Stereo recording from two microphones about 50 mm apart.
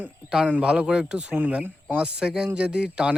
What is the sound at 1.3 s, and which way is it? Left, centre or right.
Speech, right.